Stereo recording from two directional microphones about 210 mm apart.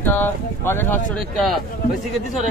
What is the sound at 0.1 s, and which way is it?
Speech, 10° left (ahead or behind).